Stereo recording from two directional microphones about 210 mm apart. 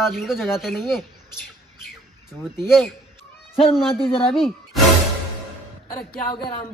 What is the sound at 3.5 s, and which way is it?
A man's voice, 25° left (ahead or behind).